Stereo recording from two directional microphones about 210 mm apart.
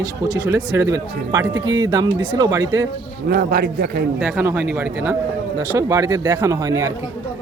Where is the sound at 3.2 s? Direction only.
45° right (ahead or behind).